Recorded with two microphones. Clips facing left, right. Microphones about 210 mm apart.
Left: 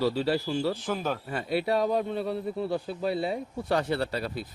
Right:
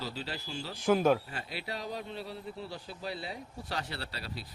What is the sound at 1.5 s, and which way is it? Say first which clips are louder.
Speech: left 14 dB; 55° left (ahead or behind).